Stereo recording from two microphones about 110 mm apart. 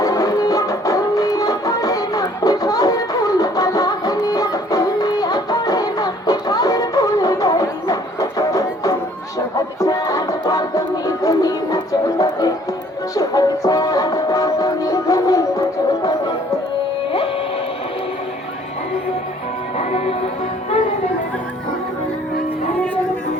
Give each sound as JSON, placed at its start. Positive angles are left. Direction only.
{"t": 0.0, "sound": "music", "side_deg": 35}
{"t": 19.8, "sound": "music", "side_deg": 75}